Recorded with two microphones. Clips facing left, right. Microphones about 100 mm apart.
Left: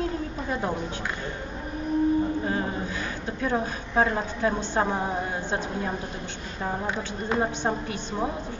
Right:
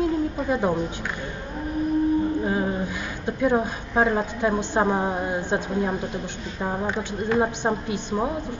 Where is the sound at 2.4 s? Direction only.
15° right (ahead or behind).